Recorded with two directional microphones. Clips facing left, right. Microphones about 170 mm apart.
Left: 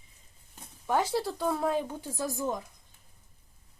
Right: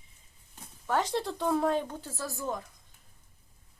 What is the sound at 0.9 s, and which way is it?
Speech, 10° left (ahead or behind).